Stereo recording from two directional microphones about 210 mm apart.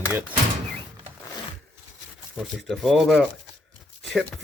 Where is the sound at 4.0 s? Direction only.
Centre (ahead or behind).